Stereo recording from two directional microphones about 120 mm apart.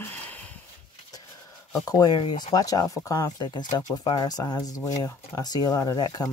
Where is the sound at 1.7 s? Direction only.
35° left (ahead or behind).